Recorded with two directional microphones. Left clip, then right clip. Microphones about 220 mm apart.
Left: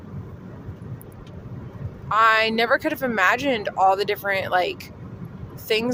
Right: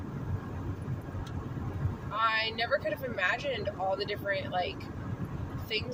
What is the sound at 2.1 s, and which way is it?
Speech, 45° left (ahead or behind).